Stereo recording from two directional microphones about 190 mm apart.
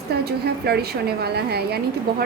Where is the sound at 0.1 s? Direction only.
55° right (ahead or behind).